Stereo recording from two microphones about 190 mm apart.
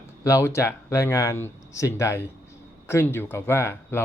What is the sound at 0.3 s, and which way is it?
Speech, 15° left (ahead or behind).